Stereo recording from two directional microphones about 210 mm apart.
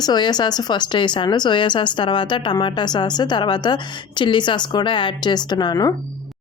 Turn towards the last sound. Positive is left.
turn(degrees=20)  # may be behind; listen again after turning